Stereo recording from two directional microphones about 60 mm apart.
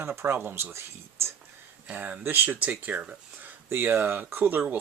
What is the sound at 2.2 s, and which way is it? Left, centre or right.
Speech, right.